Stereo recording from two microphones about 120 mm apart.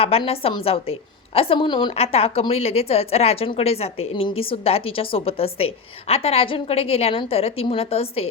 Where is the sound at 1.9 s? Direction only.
55° left (ahead or behind).